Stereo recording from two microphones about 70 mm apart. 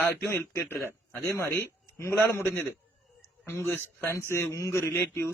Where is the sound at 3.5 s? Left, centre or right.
Left.